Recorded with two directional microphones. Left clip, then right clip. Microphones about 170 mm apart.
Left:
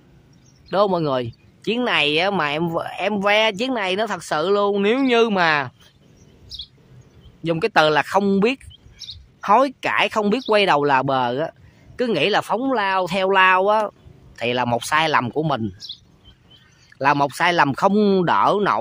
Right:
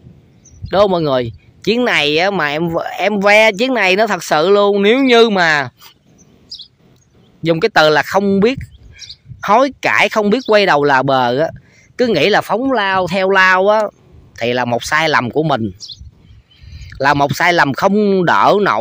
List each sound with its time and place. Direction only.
0.7 s speech: 25° right (ahead or behind)
7.4 s speech: 25° right (ahead or behind)
17.0 s speech: 25° right (ahead or behind)
17.9 s speech: 5° right (ahead or behind)
18.2 s speech: 30° right (ahead or behind)